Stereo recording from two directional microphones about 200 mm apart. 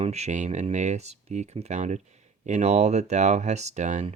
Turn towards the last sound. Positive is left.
turn(degrees=-35)  # may be behind; listen again after turning